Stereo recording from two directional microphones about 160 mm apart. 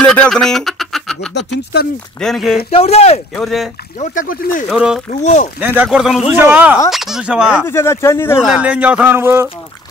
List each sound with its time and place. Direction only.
0.0 s speech: 5° left (ahead or behind)
1.3 s speech: 90° left
2.1 s speech: centre (ahead or behind)
2.7 s speech: 40° left (ahead or behind)
3.3 s speech: centre (ahead or behind)
4.0 s speech: 55° left (ahead or behind)
4.6 s speech: 5° right (ahead or behind)
5.1 s speech: 45° left (ahead or behind)
5.6 s speech: 10° right (ahead or behind)
7.6 s speech: 15° left (ahead or behind)
8.5 s speech: 5° right (ahead or behind)